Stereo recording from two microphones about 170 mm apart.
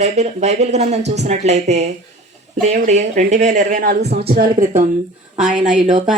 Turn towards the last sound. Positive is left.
turn(degrees=-45)  # may be behind; listen again after turning